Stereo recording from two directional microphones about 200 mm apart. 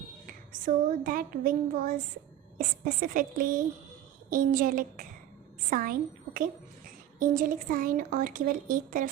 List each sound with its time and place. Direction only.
0.3 s a woman's voice: 45° right (ahead or behind)